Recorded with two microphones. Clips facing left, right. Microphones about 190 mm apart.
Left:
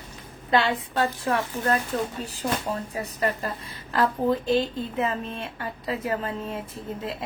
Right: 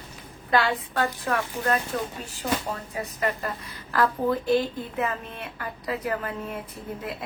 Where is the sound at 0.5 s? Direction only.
25° left (ahead or behind).